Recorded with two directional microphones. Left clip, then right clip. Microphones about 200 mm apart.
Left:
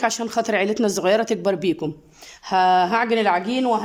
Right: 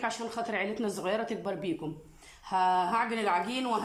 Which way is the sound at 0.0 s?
55° left (ahead or behind).